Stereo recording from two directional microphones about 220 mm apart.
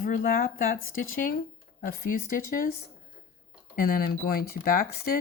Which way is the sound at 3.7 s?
40° left (ahead or behind).